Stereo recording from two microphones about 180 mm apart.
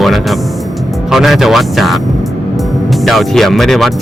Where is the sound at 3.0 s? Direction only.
Centre (ahead or behind).